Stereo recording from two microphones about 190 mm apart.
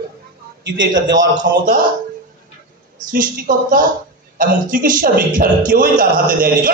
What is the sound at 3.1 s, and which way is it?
A woman's voice, 45° right (ahead or behind).